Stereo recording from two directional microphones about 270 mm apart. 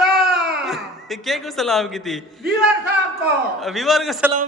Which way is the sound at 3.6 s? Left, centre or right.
Centre.